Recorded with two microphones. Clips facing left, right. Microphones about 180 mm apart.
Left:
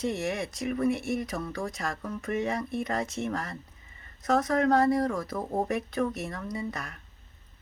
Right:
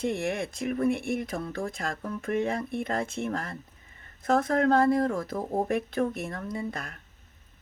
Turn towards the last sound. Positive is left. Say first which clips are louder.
# right 1 dB
turn(degrees=-50)  # may be behind; listen again after turning